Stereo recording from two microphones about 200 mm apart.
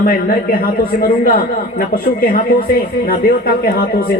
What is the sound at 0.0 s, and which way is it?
A man's voice, 45° left (ahead or behind).